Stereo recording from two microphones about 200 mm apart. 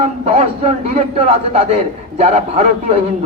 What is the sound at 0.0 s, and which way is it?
A man's voice, 30° right (ahead or behind).